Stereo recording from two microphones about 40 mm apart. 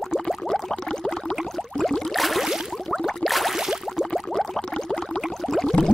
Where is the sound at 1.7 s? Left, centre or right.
Centre.